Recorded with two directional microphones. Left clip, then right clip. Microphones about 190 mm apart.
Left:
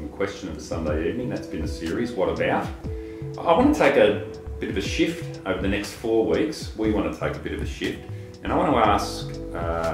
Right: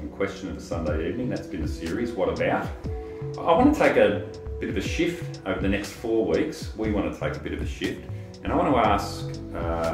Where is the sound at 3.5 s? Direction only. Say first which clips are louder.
Left 1 dB; 15° left (ahead or behind).